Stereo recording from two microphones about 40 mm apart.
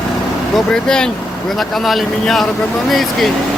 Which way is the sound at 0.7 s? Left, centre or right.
Centre.